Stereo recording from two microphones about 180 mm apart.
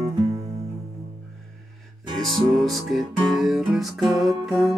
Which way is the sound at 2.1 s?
Centre (ahead or behind).